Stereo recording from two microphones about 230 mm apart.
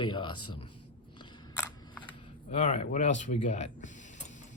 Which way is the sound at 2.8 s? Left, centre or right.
Left.